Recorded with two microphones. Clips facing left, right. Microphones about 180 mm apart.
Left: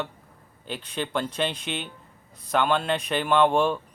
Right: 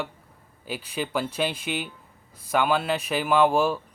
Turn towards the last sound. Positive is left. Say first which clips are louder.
# even
turn(degrees=-5)  # may be behind; listen again after turning